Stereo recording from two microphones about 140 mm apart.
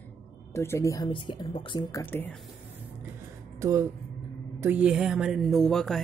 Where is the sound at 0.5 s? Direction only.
20° left (ahead or behind); by 1.9 s 35° left (ahead or behind).